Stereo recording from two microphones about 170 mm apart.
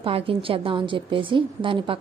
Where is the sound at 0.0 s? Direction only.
35° right (ahead or behind).